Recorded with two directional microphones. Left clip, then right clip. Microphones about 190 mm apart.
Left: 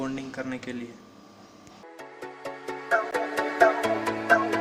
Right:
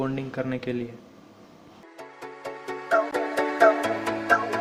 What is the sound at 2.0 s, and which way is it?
Music, centre (ahead or behind).